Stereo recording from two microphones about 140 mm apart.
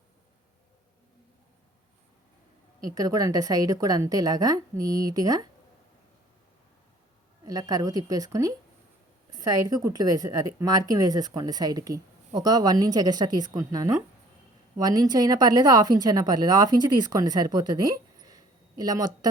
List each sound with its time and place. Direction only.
2.9 s a woman's voice: 25° right (ahead or behind)
7.4 s a woman's voice: 25° right (ahead or behind)